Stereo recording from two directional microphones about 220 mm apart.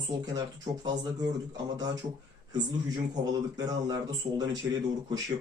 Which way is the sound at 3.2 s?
15° right (ahead or behind).